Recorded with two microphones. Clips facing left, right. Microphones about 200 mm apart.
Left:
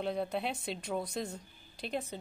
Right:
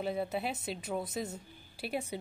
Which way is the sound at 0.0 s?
5° right (ahead or behind).